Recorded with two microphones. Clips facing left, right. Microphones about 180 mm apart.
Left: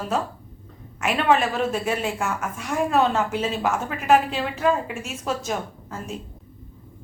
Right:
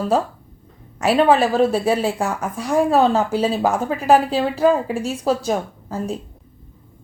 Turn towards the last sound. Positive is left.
turn(degrees=-35)  # may be behind; listen again after turning